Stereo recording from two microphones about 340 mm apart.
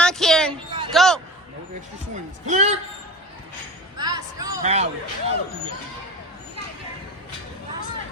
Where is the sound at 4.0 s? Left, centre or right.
Centre.